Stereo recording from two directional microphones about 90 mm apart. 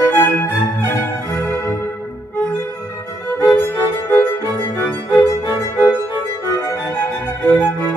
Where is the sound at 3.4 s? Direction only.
30° left (ahead or behind).